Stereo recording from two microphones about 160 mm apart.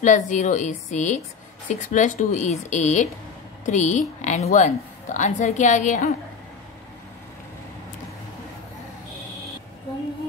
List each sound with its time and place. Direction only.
0.0 s a woman's voice: 50° left (ahead or behind)